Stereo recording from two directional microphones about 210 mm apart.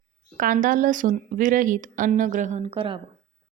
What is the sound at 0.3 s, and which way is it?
Speech, 40° right (ahead or behind).